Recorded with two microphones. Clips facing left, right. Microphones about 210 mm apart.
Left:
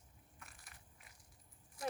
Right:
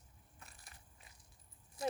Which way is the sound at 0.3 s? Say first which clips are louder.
Right 1 dB; 25° right (ahead or behind).